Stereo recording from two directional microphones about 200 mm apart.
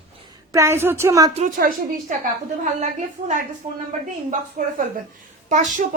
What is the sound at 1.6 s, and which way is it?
Speech, 45° right (ahead or behind).